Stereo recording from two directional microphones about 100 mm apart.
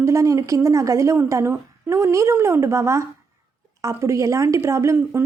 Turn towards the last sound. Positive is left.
turn(degrees=-25)  # may be behind; listen again after turning